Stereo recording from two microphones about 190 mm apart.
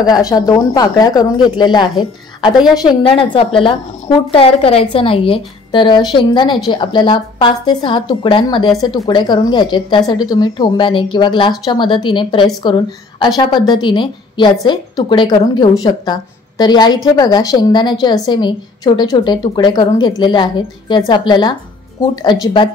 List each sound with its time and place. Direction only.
0.3 s a woman's voice: 20° left (ahead or behind)